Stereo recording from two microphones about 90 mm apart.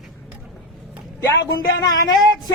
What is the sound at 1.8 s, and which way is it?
Speech, 45° left (ahead or behind).